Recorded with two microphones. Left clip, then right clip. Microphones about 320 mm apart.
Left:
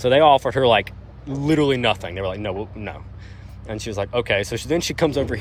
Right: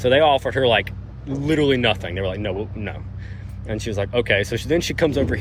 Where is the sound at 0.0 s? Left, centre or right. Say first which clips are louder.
Left 2 dB; centre.